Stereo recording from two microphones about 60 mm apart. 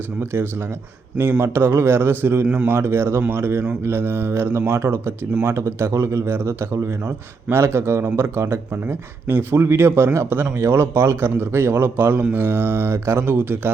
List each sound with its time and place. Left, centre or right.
1.4 s speech: right